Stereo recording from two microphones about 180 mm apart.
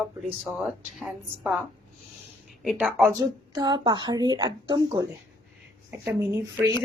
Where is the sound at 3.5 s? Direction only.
25° right (ahead or behind).